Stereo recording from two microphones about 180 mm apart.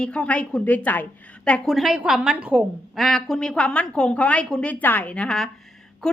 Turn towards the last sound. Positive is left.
turn(degrees=5)  # may be behind; listen again after turning